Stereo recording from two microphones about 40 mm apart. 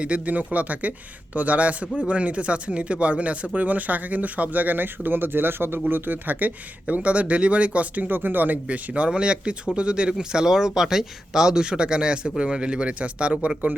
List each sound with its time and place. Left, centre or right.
0.3 s speech: right
5.9 s speech: right
6.8 s speech: right
8.1 s speech: right
8.9 s speech: right